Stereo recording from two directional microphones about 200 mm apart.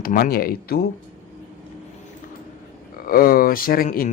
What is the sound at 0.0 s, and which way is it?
Speech, 45° left (ahead or behind).